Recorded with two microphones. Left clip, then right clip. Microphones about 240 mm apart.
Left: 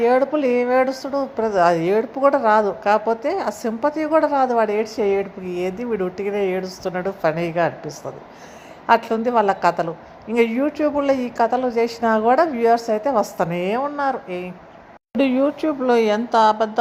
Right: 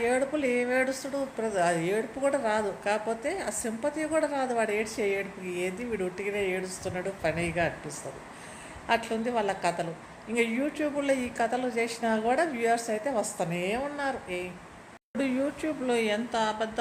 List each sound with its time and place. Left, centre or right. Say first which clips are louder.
0.0 s a woman's voice: left 10 dB; left
8.9 s a woman's voice: left 11 dB; left